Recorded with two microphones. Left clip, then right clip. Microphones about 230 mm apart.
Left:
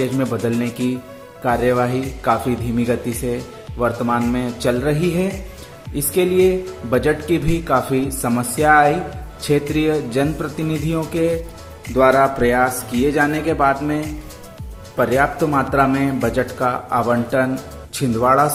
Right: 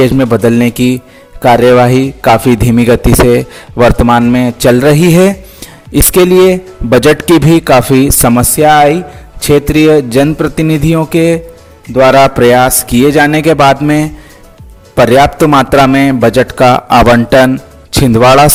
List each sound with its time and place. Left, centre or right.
0.0 s a man's voice: right